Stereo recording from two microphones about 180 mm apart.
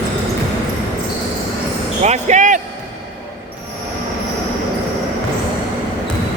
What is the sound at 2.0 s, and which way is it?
Speech, 40° right (ahead or behind).